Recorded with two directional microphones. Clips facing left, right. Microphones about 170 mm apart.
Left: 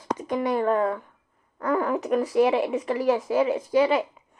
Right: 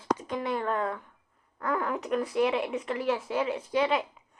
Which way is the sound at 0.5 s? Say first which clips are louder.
Left 7 dB; 10° left (ahead or behind).